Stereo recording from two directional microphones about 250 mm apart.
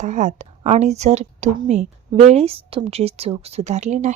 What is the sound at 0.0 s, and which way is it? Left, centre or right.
Speech, right.